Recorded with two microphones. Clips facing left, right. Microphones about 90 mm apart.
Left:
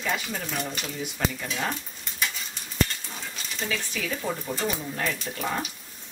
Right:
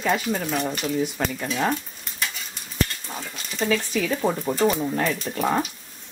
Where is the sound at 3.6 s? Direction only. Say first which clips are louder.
Right 9 dB; 40° right (ahead or behind).